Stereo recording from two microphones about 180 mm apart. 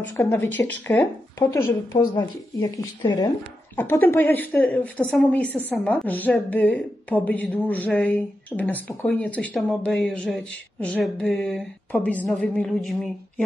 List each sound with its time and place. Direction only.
0.0 s speech: 10° left (ahead or behind)